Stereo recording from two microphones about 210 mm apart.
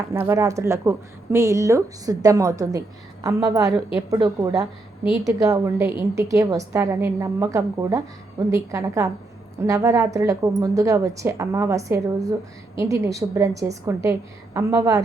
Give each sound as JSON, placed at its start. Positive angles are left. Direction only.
{"t": 0.1, "sound": "a woman's voice", "side_deg": -15}